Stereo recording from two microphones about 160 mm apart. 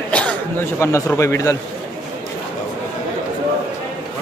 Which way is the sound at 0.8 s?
15° left (ahead or behind).